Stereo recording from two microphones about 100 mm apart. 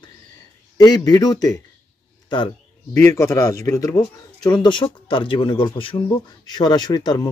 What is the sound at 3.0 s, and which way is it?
Speech, 30° left (ahead or behind).